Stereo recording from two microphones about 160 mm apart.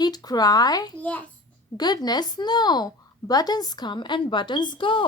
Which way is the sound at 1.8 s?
25° left (ahead or behind).